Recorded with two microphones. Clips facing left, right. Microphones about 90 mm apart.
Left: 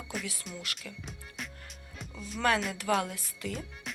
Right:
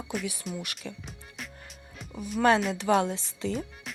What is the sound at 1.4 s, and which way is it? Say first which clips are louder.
Music: even; centre (ahead or behind).